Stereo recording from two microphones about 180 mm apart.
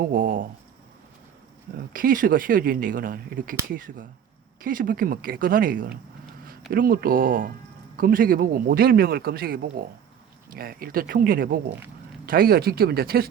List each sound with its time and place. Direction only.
0.1 s speech: 50° right (ahead or behind)
1.9 s speech: 50° right (ahead or behind)